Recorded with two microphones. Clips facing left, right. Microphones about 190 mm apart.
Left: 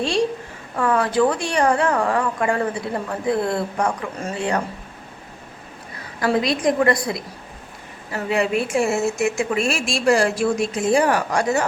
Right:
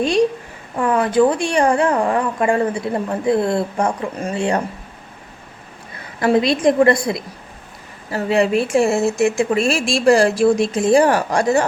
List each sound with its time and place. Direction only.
0.8 s a woman's voice: 20° right (ahead or behind)
6.1 s a woman's voice: 25° right (ahead or behind)